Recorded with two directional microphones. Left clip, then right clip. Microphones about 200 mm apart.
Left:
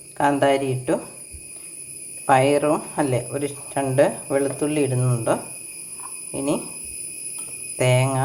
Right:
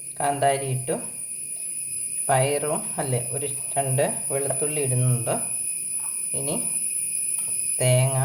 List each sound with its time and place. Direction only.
0.2 s speech: 20° left (ahead or behind)
2.2 s speech: 20° left (ahead or behind)
7.8 s speech: 20° left (ahead or behind)